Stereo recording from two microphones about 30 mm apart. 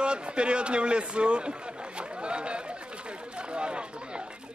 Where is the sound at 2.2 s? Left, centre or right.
Right.